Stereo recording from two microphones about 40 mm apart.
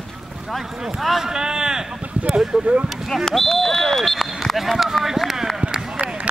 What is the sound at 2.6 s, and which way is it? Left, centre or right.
Speech, right.